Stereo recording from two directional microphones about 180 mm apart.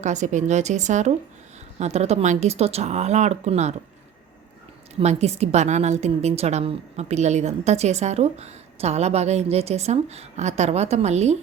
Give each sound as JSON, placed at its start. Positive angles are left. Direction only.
{"t": 0.0, "sound": "a woman's voice", "side_deg": -40}
{"t": 4.9, "sound": "a woman's voice", "side_deg": -35}